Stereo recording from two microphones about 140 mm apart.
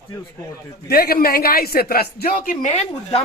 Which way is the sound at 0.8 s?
90° left.